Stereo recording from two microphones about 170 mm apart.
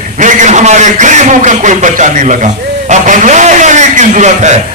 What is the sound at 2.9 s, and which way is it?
A man's voice, 45° right (ahead or behind).